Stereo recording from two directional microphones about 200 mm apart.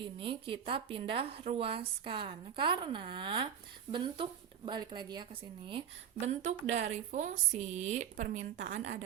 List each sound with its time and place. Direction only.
0.0 s a woman's voice: 25° right (ahead or behind)